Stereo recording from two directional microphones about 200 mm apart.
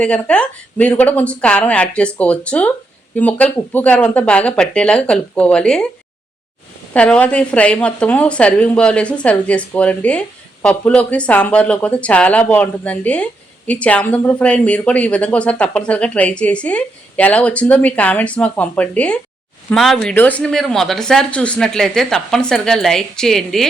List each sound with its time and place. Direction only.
0.0 s a woman's voice: 5° left (ahead or behind)
6.9 s a woman's voice: 5° left (ahead or behind)